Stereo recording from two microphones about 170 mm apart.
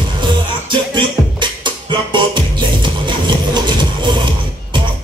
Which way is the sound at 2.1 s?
30° right (ahead or behind).